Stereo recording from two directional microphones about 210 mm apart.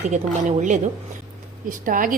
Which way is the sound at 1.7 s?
40° right (ahead or behind).